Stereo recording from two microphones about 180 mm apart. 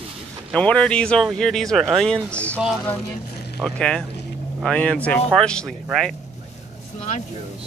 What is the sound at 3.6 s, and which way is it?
Speech, 5° left (ahead or behind).